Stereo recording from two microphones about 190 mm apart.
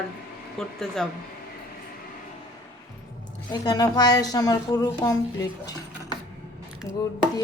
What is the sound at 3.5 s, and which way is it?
A woman's voice, 20° left (ahead or behind).